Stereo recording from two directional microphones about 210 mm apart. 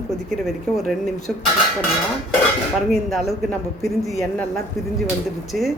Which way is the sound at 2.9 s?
Centre (ahead or behind).